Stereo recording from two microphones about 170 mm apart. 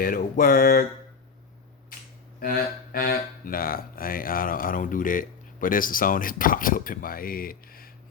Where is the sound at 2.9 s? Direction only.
60° left (ahead or behind).